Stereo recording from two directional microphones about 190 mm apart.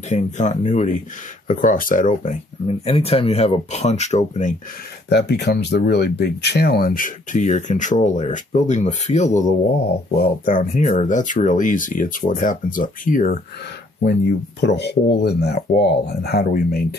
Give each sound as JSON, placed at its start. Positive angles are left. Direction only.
{"t": 0.1, "sound": "speech", "side_deg": 40}
{"t": 5.1, "sound": "speech", "side_deg": 60}
{"t": 10.1, "sound": "speech", "side_deg": 50}
{"t": 14.6, "sound": "speech", "side_deg": 65}